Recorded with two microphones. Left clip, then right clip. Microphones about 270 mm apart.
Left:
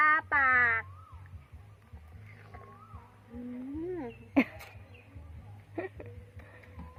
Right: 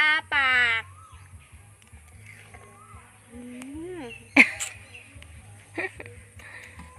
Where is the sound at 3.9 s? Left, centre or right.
Centre.